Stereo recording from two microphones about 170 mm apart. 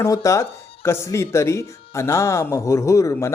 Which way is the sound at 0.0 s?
20° left (ahead or behind).